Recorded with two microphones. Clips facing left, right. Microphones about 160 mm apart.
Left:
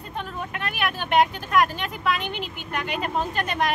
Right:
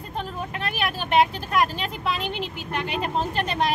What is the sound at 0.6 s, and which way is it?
Speech, 35° right (ahead or behind).